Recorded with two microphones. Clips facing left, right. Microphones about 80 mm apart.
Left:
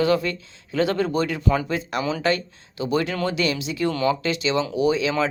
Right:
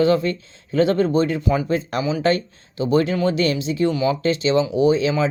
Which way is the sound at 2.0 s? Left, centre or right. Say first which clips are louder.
Right 3 dB; centre.